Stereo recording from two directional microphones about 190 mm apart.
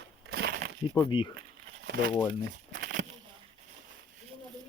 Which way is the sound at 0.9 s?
20° left (ahead or behind).